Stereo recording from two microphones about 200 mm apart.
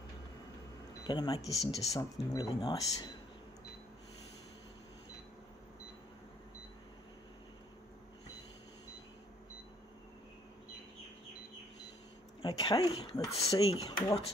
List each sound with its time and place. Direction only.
1.0 s speech: 20° left (ahead or behind)
1.6 s speech: centre (ahead or behind)
2.0 s speech: 20° left (ahead or behind)
12.4 s speech: 20° left (ahead or behind)